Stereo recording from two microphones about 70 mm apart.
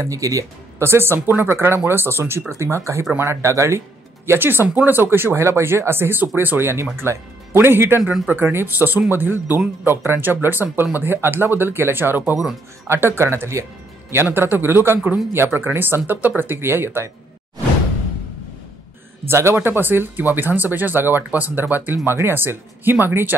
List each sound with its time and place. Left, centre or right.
0.0 s speech: right
0.8 s speech: right
4.3 s speech: right
19.2 s speech: right